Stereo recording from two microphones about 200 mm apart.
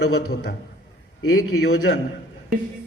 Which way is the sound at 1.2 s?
90° left.